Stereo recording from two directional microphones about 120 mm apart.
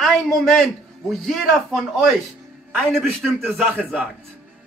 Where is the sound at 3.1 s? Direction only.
20° right (ahead or behind).